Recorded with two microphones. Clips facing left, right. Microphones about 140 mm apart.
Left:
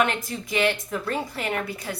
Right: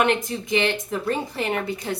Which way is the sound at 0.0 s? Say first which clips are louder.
Right 3 dB; 20° right (ahead or behind).